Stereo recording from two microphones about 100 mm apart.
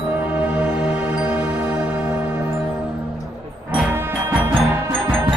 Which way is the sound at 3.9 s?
20° right (ahead or behind).